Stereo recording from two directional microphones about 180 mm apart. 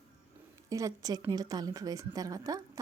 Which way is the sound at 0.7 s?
20° right (ahead or behind).